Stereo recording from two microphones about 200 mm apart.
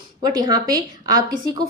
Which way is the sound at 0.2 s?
20° right (ahead or behind).